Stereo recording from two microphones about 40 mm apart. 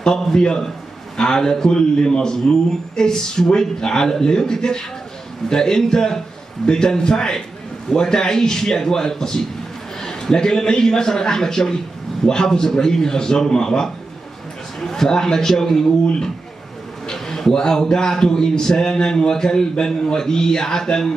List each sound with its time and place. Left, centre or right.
0.0 s speech: centre